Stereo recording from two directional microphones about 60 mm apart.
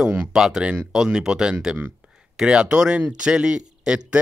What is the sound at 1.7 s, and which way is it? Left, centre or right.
Speech, right.